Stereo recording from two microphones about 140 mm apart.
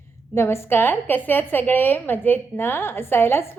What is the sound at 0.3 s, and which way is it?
A woman's voice, 20° left (ahead or behind).